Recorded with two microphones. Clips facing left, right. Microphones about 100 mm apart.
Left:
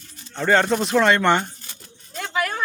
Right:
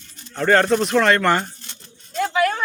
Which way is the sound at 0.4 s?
5° left (ahead or behind).